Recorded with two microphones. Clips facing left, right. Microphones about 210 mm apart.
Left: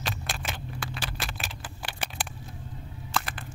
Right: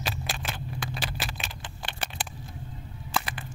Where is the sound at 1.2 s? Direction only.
5° left (ahead or behind).